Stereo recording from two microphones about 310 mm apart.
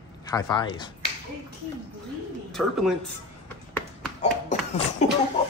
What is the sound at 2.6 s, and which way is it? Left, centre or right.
Speech, centre.